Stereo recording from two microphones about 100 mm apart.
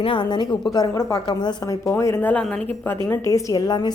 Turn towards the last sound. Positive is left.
turn(degrees=45)  # may be behind; listen again after turning